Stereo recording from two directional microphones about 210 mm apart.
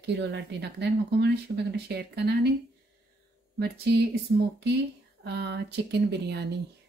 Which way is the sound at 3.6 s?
50° right (ahead or behind).